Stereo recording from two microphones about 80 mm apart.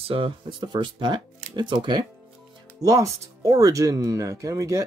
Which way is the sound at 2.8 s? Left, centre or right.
Right.